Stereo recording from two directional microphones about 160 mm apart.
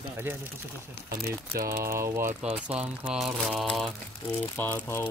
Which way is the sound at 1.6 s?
20° right (ahead or behind).